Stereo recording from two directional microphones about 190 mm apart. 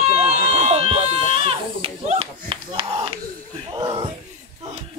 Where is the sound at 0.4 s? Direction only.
35° right (ahead or behind).